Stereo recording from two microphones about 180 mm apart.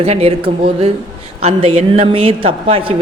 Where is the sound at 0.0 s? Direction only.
35° right (ahead or behind).